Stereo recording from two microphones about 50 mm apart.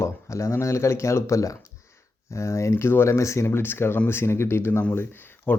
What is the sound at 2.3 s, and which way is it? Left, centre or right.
Speech, left.